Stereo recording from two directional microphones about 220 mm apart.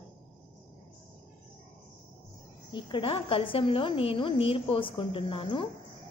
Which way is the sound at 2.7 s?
20° left (ahead or behind).